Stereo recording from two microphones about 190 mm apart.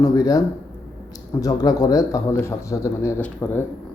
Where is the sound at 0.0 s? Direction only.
20° left (ahead or behind).